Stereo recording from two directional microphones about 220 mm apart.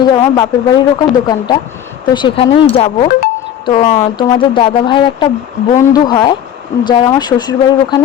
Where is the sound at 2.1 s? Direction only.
20° left (ahead or behind).